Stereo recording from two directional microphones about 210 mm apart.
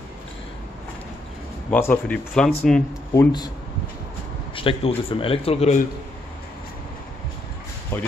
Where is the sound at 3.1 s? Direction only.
20° left (ahead or behind).